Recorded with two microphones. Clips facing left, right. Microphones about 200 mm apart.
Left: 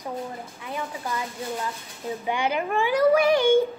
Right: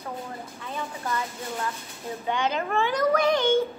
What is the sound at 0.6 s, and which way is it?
A child's voice, 10° left (ahead or behind).